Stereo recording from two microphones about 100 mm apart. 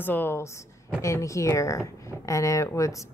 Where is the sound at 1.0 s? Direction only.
30° left (ahead or behind).